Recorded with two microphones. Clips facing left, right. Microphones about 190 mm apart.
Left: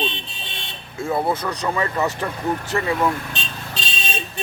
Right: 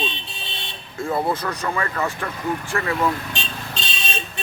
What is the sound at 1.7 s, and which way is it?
A man's voice, 20° left (ahead or behind).